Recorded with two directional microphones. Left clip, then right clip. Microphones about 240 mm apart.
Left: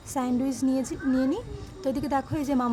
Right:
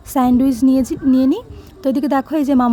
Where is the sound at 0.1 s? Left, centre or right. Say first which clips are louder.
Right 13 dB; right.